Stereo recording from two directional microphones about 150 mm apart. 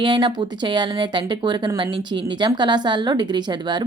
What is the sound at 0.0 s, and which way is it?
Speech, 30° right (ahead or behind).